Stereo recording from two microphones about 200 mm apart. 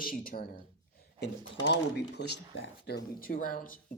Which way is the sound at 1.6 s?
55° left (ahead or behind).